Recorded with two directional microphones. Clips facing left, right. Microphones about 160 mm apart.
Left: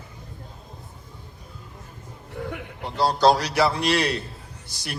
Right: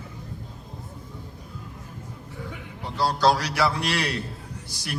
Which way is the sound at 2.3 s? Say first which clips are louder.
Left 7 dB; 60° left (ahead or behind).